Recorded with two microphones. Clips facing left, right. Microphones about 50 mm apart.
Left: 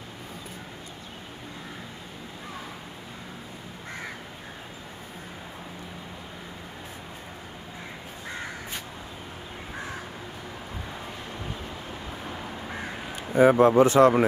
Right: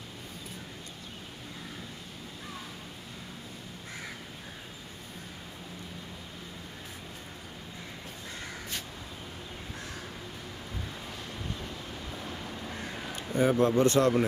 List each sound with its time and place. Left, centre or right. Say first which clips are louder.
11.4 s crow: left 3 dB; centre
13.7 s speech: left 7 dB; centre